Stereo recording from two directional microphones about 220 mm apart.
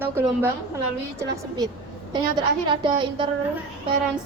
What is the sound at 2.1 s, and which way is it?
A woman's voice, 20° right (ahead or behind).